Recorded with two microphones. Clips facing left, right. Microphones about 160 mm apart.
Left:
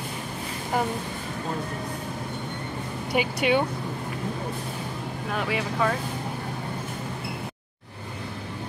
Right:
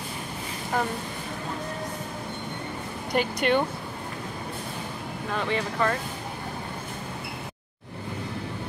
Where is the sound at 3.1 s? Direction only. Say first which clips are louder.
Even; 5° left (ahead or behind).